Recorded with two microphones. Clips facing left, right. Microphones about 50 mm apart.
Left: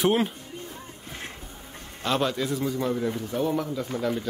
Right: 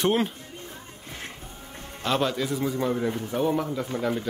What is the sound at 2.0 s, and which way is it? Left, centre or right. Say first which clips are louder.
Speech: even; centre.